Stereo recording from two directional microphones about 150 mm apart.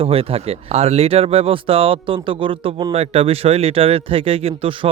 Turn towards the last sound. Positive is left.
turn(degrees=-35)  # may be behind; listen again after turning